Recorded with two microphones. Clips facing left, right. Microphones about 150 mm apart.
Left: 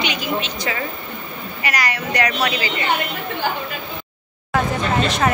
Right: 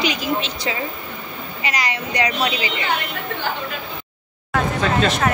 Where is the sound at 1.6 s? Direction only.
20° right (ahead or behind).